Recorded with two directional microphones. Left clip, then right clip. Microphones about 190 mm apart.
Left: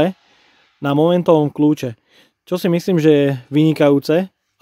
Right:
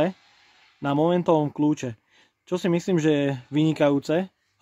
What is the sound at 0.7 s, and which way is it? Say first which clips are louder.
Speech: left 7 dB; 45° left (ahead or behind).